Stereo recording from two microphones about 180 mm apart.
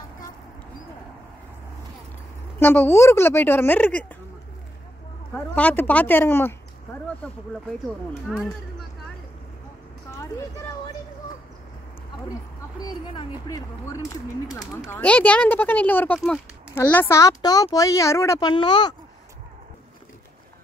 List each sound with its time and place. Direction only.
2.6 s speech: 10° left (ahead or behind)
5.3 s speech: 10° left (ahead or behind)
8.1 s speech: centre (ahead or behind)
12.8 s speech: 25° left (ahead or behind)
14.6 s speech: 10° left (ahead or behind)